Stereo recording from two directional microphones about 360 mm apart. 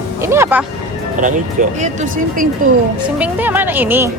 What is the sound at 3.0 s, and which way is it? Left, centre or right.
A woman's voice, centre.